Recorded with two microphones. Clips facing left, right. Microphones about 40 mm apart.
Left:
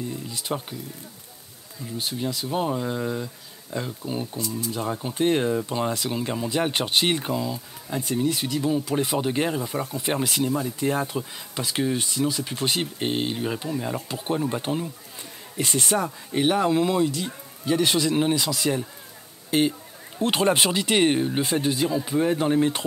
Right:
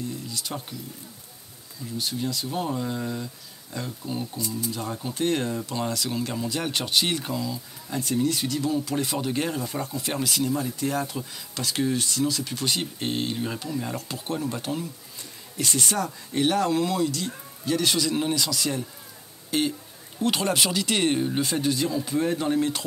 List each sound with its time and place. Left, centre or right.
0.1 s speech: left
2.0 s speech: left
9.8 s speech: left